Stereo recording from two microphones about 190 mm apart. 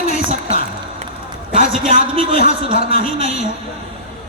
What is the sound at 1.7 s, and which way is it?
A man's voice, 30° right (ahead or behind).